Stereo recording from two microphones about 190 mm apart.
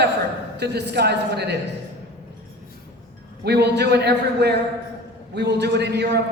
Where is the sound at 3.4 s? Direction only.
60° right (ahead or behind).